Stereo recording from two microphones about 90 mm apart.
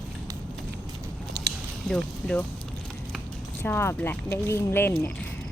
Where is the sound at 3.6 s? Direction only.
25° left (ahead or behind).